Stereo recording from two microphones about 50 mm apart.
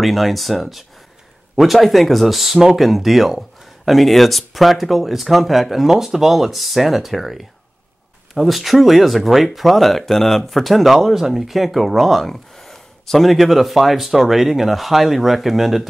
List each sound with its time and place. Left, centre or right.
0.0 s speech: centre